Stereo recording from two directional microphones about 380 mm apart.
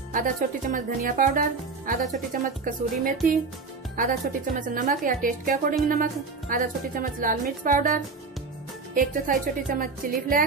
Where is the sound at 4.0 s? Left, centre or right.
Right.